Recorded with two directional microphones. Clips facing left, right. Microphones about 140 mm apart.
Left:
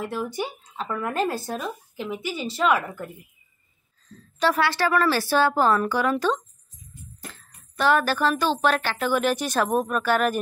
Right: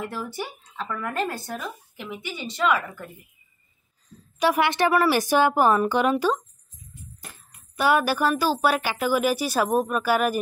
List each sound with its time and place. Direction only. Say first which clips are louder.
0.0 s speech: left 3 dB; 10° left (ahead or behind)
0.8 s speech: left 3 dB; 20° left (ahead or behind)
4.1 s speech: right 1 dB; 10° right (ahead or behind)